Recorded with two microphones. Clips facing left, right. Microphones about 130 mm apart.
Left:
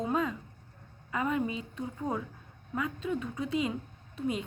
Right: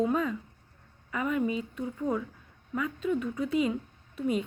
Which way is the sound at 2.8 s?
25° left (ahead or behind).